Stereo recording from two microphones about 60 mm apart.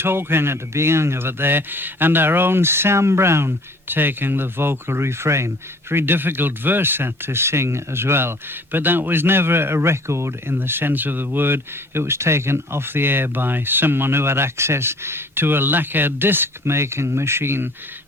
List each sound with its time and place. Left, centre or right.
0.0 s speech: right
5.9 s speech: right